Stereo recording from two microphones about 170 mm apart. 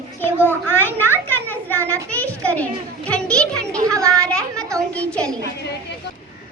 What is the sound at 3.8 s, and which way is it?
Children playing, 20° right (ahead or behind).